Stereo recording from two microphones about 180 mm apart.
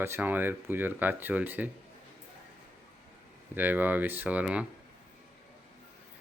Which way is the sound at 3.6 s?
10° right (ahead or behind).